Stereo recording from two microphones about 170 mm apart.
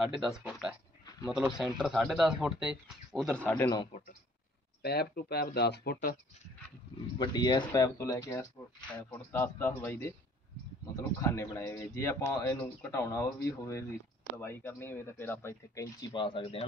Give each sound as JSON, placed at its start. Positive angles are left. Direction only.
{"t": 0.0, "sound": "speech", "side_deg": -5}
{"t": 3.4, "sound": "speech", "side_deg": 15}
{"t": 4.8, "sound": "speech", "side_deg": 70}
{"t": 7.2, "sound": "speech", "side_deg": 25}